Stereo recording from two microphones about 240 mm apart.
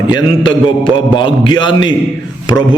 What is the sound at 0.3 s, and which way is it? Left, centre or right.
Mantra, left.